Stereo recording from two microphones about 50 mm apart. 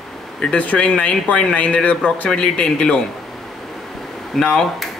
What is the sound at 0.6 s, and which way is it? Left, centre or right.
A man's voice, left.